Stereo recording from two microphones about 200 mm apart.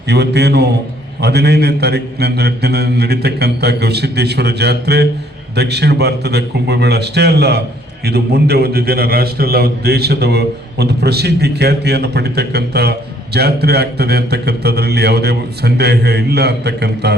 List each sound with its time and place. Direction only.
0.1 s a man's voice: 55° right (ahead or behind)